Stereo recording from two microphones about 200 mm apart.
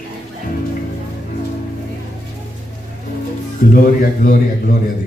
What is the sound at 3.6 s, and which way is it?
Speech, 45° left (ahead or behind).